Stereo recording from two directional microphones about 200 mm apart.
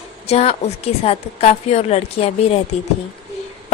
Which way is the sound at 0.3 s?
30° left (ahead or behind).